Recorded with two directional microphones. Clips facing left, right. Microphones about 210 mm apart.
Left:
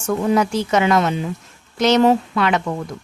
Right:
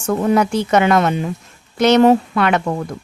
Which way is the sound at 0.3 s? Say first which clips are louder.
Right 2 dB; 60° right (ahead or behind).